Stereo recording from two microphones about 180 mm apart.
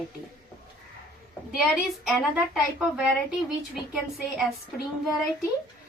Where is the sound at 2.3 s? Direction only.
Centre (ahead or behind).